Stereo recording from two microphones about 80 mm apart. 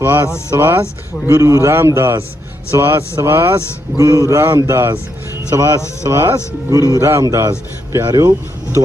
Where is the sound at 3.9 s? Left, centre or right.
Right.